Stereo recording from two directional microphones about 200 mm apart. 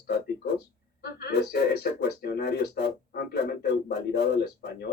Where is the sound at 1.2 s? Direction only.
55° left (ahead or behind).